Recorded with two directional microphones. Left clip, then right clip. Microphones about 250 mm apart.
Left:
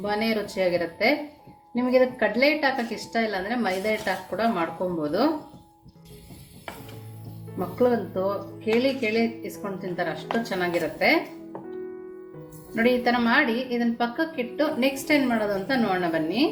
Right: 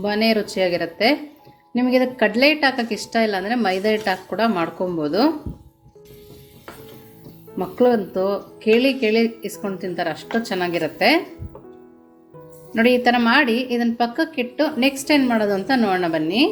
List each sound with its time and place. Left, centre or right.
0.0 s a woman's voice: right
7.8 s a woman's voice: right
10.5 s a woman's voice: right
12.7 s a woman's voice: right